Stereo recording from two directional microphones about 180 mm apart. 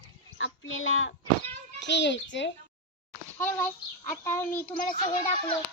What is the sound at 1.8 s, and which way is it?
Speech, 75° left (ahead or behind).